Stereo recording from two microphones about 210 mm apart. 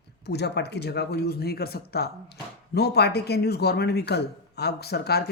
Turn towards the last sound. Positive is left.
turn(degrees=50)  # may be behind; listen again after turning